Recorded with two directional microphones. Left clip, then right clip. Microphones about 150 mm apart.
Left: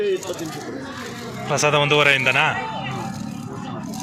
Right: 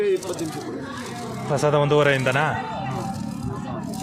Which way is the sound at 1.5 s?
35° right (ahead or behind).